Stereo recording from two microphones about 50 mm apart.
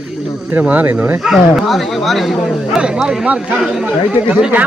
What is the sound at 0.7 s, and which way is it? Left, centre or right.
Speech, right.